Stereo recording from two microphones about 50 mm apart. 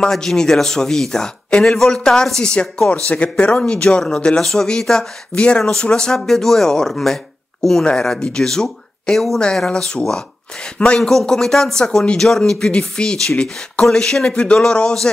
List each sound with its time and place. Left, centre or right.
0.0 s speech: centre
3.1 s speech: left